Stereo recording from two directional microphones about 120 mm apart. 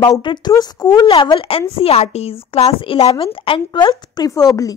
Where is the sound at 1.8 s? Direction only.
55° left (ahead or behind); by 4.7 s 30° left (ahead or behind).